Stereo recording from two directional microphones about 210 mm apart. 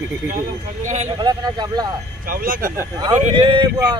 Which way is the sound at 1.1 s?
20° right (ahead or behind).